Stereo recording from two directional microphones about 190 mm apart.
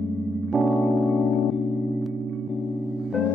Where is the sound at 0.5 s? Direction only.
Centre (ahead or behind).